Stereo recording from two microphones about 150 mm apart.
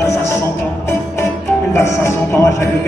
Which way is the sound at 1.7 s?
20° left (ahead or behind).